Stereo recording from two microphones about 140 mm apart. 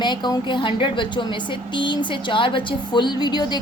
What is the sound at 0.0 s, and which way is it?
A woman's voice, 30° left (ahead or behind).